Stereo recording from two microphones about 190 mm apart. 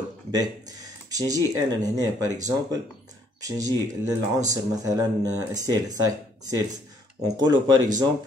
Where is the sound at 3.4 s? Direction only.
20° right (ahead or behind).